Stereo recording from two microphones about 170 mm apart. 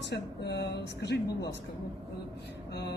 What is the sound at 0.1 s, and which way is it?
Music, 80° left.